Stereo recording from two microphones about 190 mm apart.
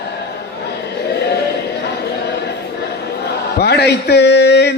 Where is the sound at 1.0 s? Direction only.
60° left (ahead or behind).